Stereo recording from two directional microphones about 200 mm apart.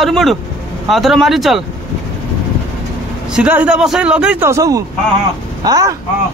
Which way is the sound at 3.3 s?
5° right (ahead or behind).